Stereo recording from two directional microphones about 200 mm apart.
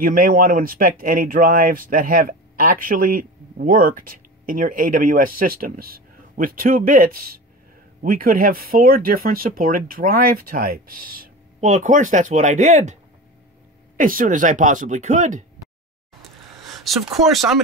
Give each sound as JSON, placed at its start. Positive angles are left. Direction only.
{"t": 0.0, "sound": "speech", "side_deg": -45}
{"t": 16.6, "sound": "a sound", "side_deg": 0}
{"t": 17.2, "sound": "speech", "side_deg": 0}